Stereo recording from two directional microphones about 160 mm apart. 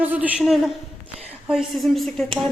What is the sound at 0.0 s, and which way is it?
A woman's voice, 10° right (ahead or behind).